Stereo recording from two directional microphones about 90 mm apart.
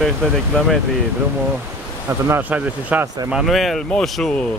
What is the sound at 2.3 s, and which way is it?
Speech, 20° right (ahead or behind).